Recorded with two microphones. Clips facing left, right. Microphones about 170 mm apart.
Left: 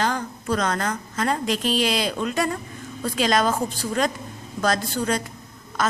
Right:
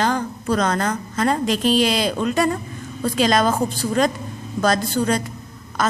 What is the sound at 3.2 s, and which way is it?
Speech, 35° right (ahead or behind).